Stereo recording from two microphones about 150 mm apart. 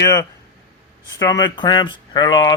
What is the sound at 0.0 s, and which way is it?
A man's voice, 20° left (ahead or behind).